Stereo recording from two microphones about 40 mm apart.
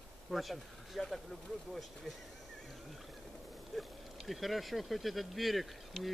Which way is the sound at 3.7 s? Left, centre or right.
Centre.